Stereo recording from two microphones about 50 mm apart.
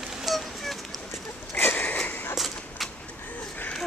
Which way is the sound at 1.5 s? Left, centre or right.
Left.